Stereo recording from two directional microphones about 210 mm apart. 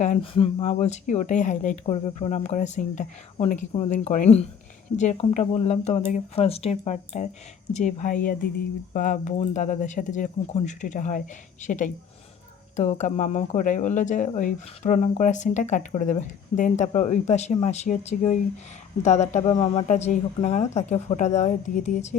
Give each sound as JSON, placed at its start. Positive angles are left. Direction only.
{"t": 0.0, "sound": "speech", "side_deg": 30}